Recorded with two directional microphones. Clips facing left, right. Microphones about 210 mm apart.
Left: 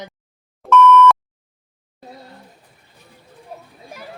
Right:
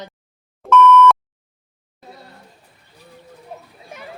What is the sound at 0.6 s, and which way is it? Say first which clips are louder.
Beep: even; centre (ahead or behind).